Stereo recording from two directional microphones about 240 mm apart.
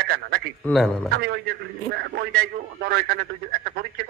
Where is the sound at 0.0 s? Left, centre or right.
Right.